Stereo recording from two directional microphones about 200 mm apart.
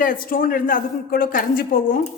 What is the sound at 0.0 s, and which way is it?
A woman's voice, 45° left (ahead or behind).